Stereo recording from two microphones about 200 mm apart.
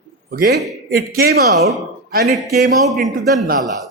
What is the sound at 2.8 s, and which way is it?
Speech, centre (ahead or behind).